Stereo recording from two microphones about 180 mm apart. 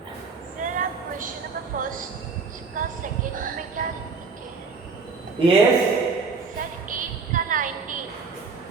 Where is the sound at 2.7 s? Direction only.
50° right (ahead or behind).